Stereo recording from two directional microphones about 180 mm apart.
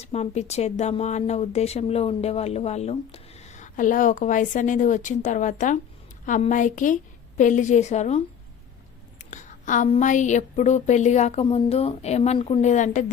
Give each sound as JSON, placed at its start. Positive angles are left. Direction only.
{"t": 0.0, "sound": "a woman's voice", "side_deg": 35}
{"t": 9.3, "sound": "speech", "side_deg": 45}